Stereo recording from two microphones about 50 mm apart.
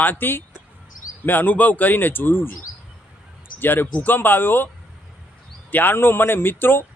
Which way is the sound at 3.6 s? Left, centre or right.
Left.